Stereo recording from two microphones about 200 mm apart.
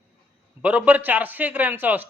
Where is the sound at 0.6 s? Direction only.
5° right (ahead or behind).